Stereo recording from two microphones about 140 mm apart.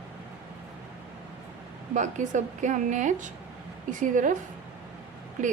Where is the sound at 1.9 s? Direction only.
60° right (ahead or behind).